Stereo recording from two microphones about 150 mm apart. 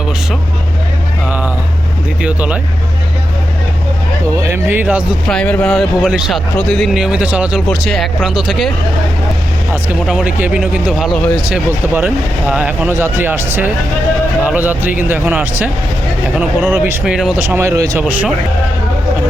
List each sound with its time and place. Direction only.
2.2 s speech: 10° right (ahead or behind)
4.4 s speech: 15° right (ahead or behind)
5.3 s speech: 10° left (ahead or behind); by 7.6 s 10° right (ahead or behind)
7.7 s speech: centre (ahead or behind)
10.1 s speech: 5° right (ahead or behind)